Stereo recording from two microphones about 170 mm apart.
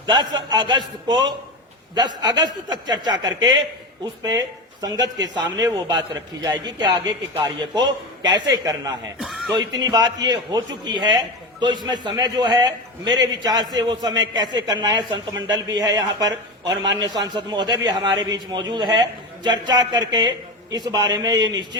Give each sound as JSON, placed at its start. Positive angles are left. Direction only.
{"t": 0.0, "sound": "a man's voice", "side_deg": -25}
{"t": 2.4, "sound": "a man's voice", "side_deg": -25}
{"t": 9.2, "sound": "music", "side_deg": 0}
{"t": 9.6, "sound": "a man's voice", "side_deg": -25}